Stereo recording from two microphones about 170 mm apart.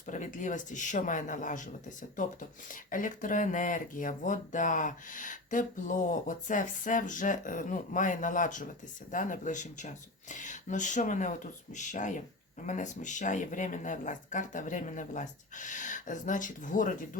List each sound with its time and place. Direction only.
0.1 s speech: 50° left (ahead or behind)